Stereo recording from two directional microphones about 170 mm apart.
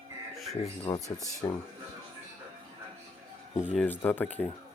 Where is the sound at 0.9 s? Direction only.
30° left (ahead or behind).